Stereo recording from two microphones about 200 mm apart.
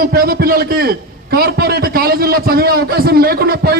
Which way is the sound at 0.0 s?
50° right (ahead or behind).